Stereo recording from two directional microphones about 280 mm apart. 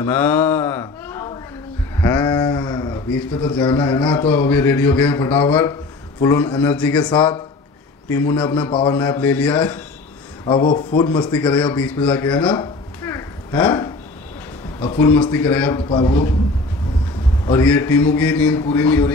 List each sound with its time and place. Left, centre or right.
0.0 s a man's voice: centre
2.0 s a sound: centre
3.7 s a man's voice: centre
10.4 s speech: centre
12.5 s a sound: centre
14.8 s a man's voice: centre
17.5 s a man's voice: centre